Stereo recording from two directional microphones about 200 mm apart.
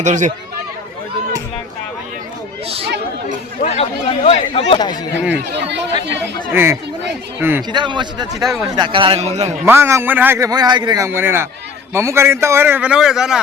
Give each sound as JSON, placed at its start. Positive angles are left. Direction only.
{"t": 0.0, "sound": "speech", "side_deg": -35}
{"t": 3.6, "sound": "speech", "side_deg": 30}
{"t": 5.5, "sound": "speech", "side_deg": -60}
{"t": 6.5, "sound": "a man's voice", "side_deg": -10}
{"t": 7.7, "sound": "a man's voice", "side_deg": -25}
{"t": 8.4, "sound": "speech", "side_deg": 0}
{"t": 8.7, "sound": "a man's voice", "side_deg": -25}
{"t": 9.6, "sound": "a man's voice", "side_deg": -10}